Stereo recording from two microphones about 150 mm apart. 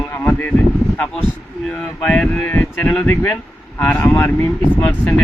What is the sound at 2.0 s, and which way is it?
Speech, 10° left (ahead or behind).